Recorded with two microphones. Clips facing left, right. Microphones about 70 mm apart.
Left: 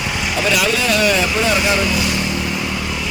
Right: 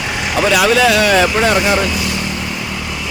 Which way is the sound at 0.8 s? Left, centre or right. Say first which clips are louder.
Right 5 dB; right.